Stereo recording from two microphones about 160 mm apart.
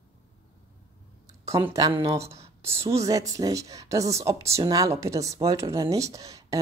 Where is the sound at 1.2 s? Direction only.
20° right (ahead or behind).